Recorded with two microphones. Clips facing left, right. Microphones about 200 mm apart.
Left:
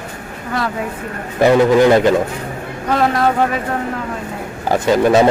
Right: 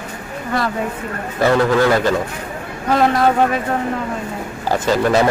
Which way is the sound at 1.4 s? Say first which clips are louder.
Left 4 dB; 20° left (ahead or behind).